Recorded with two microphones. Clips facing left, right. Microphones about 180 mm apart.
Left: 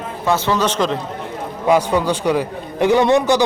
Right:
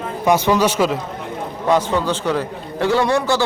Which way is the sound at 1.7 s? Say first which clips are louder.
Left 2 dB; 10° left (ahead or behind).